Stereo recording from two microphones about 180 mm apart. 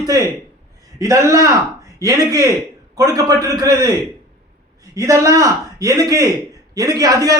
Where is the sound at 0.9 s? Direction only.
15° right (ahead or behind).